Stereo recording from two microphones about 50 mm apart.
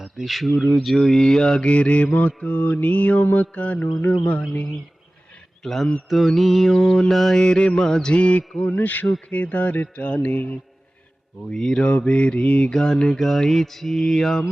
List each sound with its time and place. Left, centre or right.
0.0 s speech: centre; by 2.0 s left
2.1 s mantra: left
5.6 s mantra: centre
6.7 s speech: centre
8.1 s mantra: left
11.4 s speech: centre
11.9 s mantra: left
12.7 s speech: centre